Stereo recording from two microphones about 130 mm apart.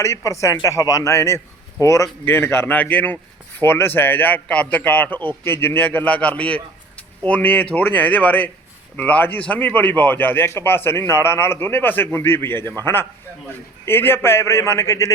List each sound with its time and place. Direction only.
0.0 s a man's voice: 25° left (ahead or behind)